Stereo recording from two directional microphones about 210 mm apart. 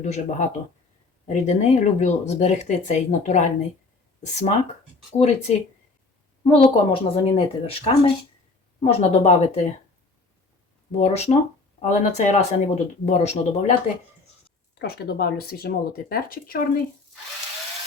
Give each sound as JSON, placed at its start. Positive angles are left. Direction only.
{"t": 0.0, "sound": "speech", "side_deg": 35}
{"t": 10.9, "sound": "speech", "side_deg": 30}
{"t": 14.8, "sound": "speech", "side_deg": 50}